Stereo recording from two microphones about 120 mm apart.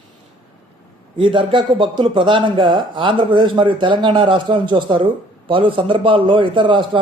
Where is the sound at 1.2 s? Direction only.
45° right (ahead or behind).